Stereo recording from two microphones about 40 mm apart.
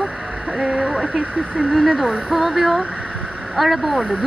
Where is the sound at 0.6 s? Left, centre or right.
Right.